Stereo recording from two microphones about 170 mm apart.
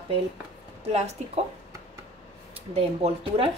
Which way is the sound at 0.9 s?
40° right (ahead or behind).